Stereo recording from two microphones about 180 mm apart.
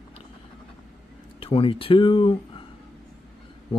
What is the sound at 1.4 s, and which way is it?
Speech, 30° left (ahead or behind).